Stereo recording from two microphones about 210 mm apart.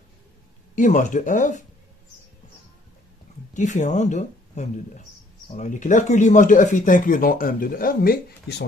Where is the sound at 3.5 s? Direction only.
35° left (ahead or behind).